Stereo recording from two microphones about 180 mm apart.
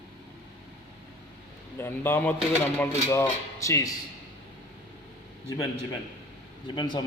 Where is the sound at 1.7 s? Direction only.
10° left (ahead or behind).